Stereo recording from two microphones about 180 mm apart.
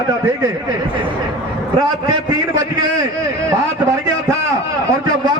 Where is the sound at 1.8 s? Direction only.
20° right (ahead or behind).